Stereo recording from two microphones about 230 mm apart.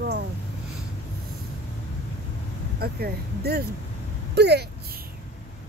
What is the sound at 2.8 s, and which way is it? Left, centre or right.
Speech, right.